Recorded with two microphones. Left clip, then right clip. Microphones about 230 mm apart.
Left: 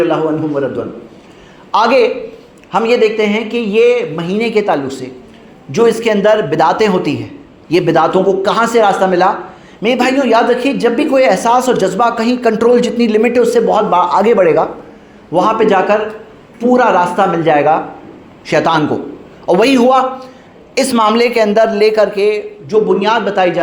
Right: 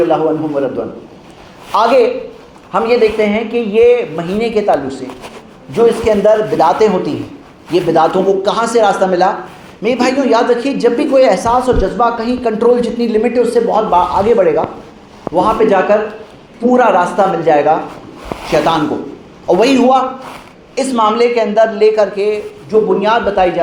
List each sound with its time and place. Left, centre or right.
1.7 s a woman's voice: left